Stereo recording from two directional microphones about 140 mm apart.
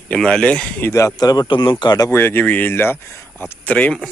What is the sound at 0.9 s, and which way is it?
Speech, 20° left (ahead or behind).